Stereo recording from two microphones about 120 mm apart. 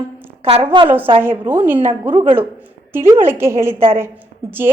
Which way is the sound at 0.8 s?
15° right (ahead or behind).